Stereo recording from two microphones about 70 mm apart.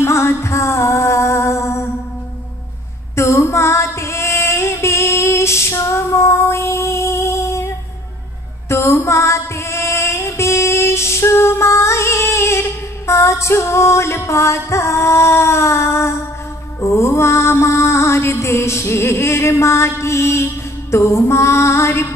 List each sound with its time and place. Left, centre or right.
0.0 s music: left
3.2 s female singing: left
16.8 s music: left